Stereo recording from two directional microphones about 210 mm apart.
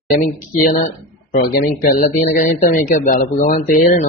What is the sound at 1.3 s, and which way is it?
Speech, 45° left (ahead or behind).